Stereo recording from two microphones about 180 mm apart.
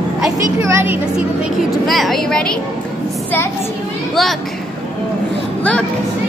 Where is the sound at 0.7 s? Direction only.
10° right (ahead or behind).